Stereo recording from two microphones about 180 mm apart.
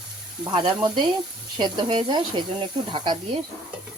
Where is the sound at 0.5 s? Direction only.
25° right (ahead or behind).